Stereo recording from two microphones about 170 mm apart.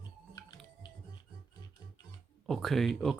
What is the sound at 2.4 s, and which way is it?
Speech, centre (ahead or behind).